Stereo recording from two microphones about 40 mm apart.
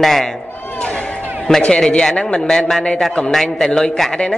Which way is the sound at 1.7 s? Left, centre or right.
Left.